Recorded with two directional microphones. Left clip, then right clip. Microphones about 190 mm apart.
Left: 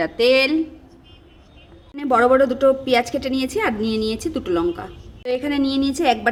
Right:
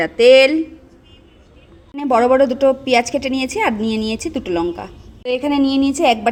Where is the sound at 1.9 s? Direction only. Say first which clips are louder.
Right 2 dB; 10° right (ahead or behind).